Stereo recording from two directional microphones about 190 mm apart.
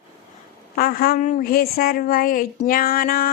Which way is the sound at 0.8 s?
55° left (ahead or behind).